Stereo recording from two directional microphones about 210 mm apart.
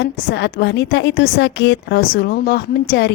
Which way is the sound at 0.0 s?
50° left (ahead or behind).